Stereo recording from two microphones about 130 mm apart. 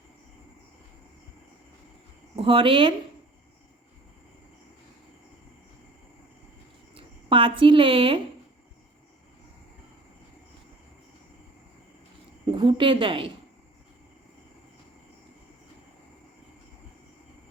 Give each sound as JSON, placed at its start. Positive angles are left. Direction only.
{"t": 2.3, "sound": "speech", "side_deg": -45}
{"t": 6.9, "sound": "speech", "side_deg": -40}
{"t": 12.5, "sound": "a woman's voice", "side_deg": -40}